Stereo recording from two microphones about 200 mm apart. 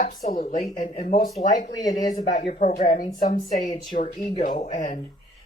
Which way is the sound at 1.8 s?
20° left (ahead or behind).